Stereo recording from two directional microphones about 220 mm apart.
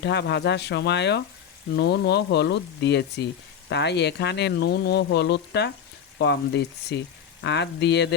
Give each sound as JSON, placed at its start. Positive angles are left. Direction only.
{"t": 0.0, "sound": "speech", "side_deg": 50}